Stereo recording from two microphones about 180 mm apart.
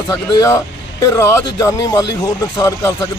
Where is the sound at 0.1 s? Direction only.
20° left (ahead or behind).